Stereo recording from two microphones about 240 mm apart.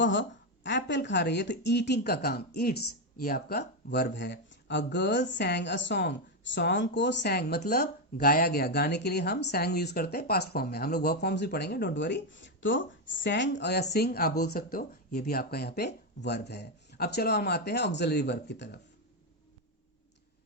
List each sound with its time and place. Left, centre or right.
0.0 s a woman's voice: left